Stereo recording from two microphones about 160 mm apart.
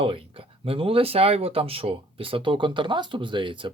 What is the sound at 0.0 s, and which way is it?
Speech, 35° right (ahead or behind).